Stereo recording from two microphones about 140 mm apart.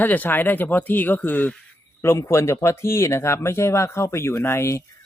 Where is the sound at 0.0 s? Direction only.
10° left (ahead or behind).